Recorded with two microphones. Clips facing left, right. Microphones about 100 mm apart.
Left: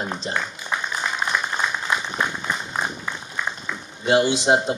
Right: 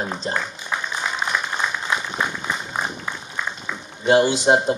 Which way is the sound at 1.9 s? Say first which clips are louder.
Even; 5° right (ahead or behind).